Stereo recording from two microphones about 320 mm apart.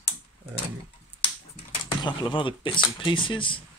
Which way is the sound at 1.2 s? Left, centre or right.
Centre.